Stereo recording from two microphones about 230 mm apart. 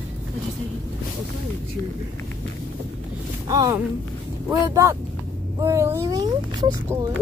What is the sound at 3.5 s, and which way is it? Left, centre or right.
Speech, centre.